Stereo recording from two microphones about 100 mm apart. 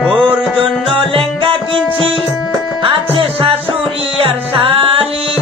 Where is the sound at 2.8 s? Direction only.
70° right (ahead or behind).